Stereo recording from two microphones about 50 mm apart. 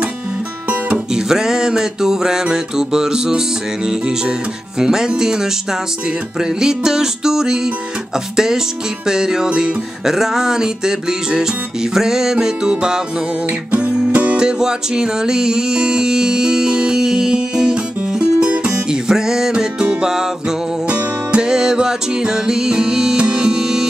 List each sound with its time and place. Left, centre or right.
0.7 s music: right
1.1 s music: centre
13.7 s music: right
14.3 s music: centre
18.9 s music: centre
20.8 s music: right
21.5 s music: centre